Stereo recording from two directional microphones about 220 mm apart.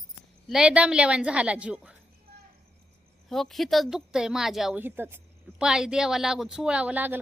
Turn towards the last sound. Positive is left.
turn(degrees=-10)  # may be behind; listen again after turning